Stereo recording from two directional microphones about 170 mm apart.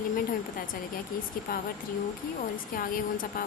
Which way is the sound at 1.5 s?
55° left (ahead or behind).